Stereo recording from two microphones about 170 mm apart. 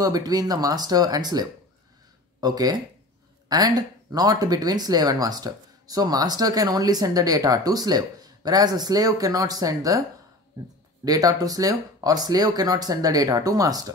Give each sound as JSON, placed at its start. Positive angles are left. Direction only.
{"t": 0.0, "sound": "speech", "side_deg": -20}
{"t": 11.1, "sound": "speech", "side_deg": -20}